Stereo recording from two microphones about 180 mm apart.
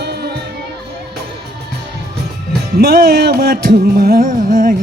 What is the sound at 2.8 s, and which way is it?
Carnatic music, 60° right (ahead or behind).